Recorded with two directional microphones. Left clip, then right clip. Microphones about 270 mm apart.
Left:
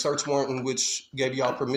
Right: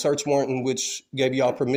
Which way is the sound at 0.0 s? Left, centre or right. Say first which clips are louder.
Right 3 dB; right.